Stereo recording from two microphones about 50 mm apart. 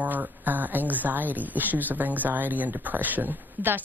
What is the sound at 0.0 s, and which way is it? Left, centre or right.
Speech, right.